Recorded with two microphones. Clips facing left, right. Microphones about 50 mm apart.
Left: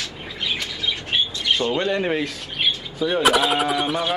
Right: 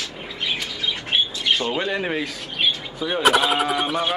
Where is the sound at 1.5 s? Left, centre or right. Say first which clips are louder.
Left 3 dB; centre.